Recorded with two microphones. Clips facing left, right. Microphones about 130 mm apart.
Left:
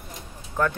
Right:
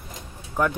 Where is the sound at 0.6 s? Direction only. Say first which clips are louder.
Right 1 dB; 15° right (ahead or behind).